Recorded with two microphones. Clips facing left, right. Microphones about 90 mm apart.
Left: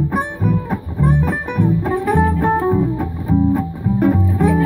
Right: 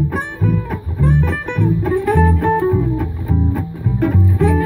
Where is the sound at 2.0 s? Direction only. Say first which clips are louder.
Even; 15° left (ahead or behind).